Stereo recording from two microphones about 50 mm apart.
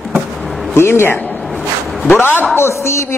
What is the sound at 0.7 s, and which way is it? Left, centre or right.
Speech, left.